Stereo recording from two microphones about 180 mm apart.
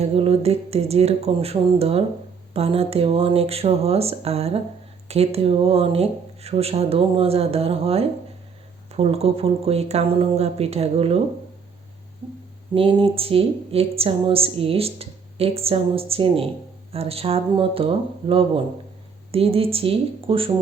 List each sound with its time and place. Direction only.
0.0 s a woman's voice: 35° right (ahead or behind)
12.7 s a woman's voice: 30° right (ahead or behind)